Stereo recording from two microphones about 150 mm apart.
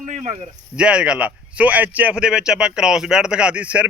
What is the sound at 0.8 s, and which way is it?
Speech, 5° right (ahead or behind).